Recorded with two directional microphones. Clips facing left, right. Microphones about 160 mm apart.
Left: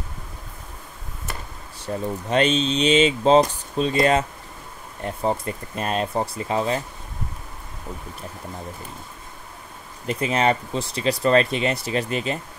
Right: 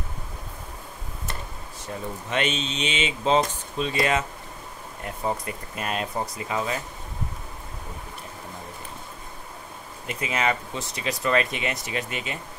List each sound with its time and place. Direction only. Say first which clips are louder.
2.2 s speech: left 7 dB; 35° left (ahead or behind)
10.0 s speech: left 5 dB; 35° left (ahead or behind)